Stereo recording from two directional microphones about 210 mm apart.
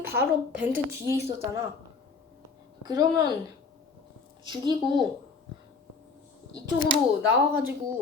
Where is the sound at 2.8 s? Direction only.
20° right (ahead or behind).